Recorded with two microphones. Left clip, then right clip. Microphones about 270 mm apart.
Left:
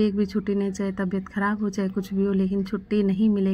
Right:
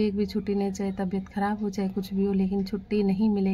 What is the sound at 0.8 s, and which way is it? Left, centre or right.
A woman's voice, centre.